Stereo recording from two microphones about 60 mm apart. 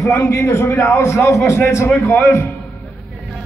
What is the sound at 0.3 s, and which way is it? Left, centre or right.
A man's voice, left.